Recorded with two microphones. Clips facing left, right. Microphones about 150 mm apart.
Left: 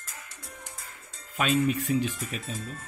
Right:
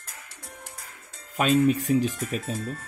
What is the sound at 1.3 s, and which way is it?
Speech, 40° right (ahead or behind).